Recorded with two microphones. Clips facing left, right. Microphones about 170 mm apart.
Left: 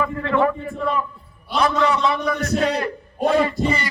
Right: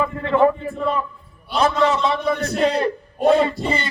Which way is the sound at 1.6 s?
25° right (ahead or behind).